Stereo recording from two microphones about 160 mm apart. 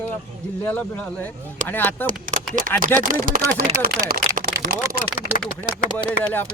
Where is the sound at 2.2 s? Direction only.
55° right (ahead or behind).